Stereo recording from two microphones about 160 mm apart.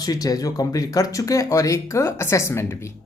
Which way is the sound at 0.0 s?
25° left (ahead or behind).